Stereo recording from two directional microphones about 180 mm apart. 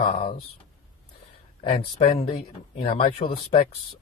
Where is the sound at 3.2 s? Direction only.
30° left (ahead or behind).